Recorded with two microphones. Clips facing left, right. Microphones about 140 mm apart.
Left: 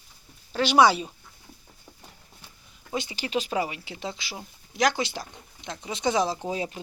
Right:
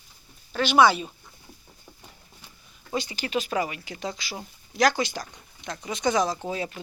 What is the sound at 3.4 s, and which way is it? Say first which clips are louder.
Speech: right 1 dB; 10° left (ahead or behind).